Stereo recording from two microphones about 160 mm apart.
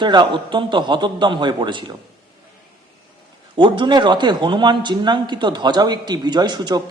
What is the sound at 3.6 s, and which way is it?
A man's voice, 30° right (ahead or behind).